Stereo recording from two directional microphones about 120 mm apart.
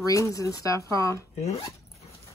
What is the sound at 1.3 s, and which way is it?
Speech, 65° left (ahead or behind).